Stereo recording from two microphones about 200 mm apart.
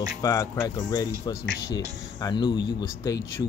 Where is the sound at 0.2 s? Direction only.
15° left (ahead or behind).